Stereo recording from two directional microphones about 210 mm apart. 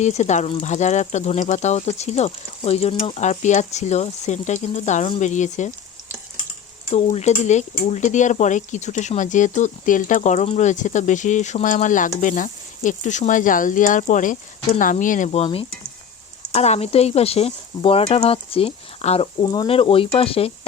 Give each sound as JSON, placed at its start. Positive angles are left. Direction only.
{"t": 0.0, "sound": "speech", "side_deg": 35}
{"t": 6.9, "sound": "speech", "side_deg": 30}